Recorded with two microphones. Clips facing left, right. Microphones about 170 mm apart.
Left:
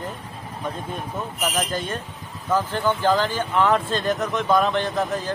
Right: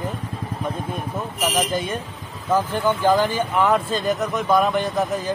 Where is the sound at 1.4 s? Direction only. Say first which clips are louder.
Right 3 dB; 15° right (ahead or behind).